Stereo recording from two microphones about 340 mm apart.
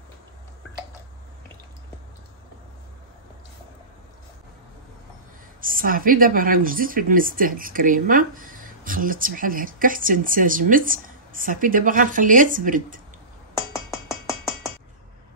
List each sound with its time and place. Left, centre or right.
5.6 s speech: right